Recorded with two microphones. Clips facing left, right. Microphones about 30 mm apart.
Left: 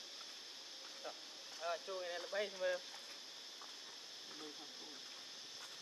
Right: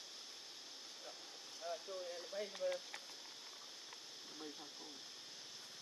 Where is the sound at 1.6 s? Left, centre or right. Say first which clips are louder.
Left 3 dB; left.